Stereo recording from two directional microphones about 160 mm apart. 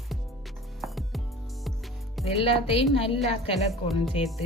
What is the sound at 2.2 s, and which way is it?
Speech, 35° left (ahead or behind).